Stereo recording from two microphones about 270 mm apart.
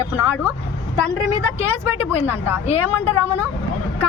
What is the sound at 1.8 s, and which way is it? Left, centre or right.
Speech, centre.